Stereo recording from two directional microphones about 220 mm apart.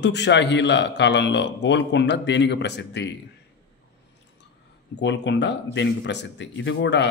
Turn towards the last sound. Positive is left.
turn(degrees=55)  # may be behind; listen again after turning